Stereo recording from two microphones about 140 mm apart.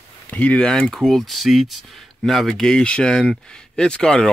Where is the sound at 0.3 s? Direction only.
10° left (ahead or behind).